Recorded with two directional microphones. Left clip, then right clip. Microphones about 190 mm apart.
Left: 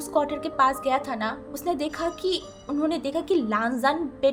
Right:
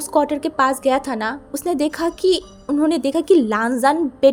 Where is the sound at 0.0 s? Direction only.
35° right (ahead or behind).